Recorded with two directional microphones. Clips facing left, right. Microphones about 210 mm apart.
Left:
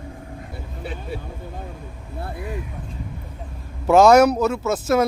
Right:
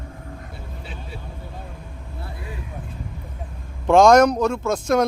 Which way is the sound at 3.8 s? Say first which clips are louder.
Even; 5° left (ahead or behind).